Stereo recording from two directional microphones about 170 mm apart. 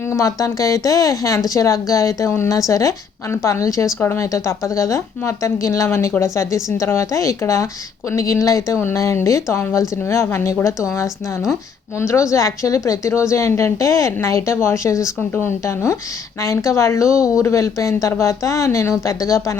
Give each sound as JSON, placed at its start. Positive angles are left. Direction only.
{"t": 0.1, "sound": "a woman's voice", "side_deg": 20}